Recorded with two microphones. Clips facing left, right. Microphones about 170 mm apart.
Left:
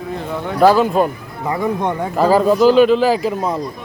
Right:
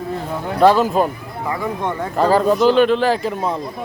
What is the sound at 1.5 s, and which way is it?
Speech, 20° left (ahead or behind).